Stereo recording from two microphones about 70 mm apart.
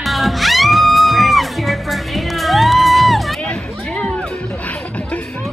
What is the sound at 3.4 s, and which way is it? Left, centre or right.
Music, centre.